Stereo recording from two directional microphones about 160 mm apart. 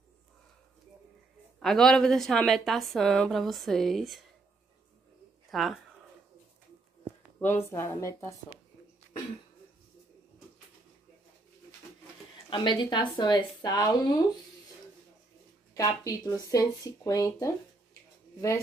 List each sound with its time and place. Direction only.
1.6 s a woman's voice: centre (ahead or behind)
5.5 s speech: centre (ahead or behind)
7.3 s speech: 15° left (ahead or behind)
12.4 s a woman's voice: 30° left (ahead or behind)
15.7 s speech: 20° left (ahead or behind)